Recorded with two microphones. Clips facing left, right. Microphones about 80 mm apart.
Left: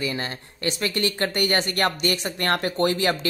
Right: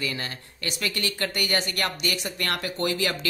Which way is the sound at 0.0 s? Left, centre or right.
Left.